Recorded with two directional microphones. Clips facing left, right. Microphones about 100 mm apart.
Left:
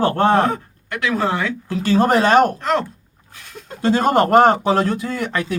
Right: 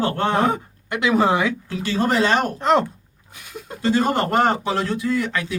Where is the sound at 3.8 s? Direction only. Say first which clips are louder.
Left 4 dB; 50° left (ahead or behind).